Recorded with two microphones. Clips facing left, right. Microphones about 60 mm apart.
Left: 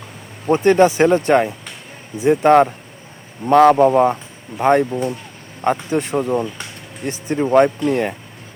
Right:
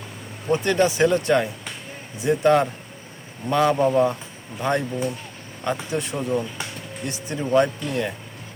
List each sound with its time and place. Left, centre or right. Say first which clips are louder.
0.5 s speech: left 7 dB; left
4.5 s speech: left 9 dB; left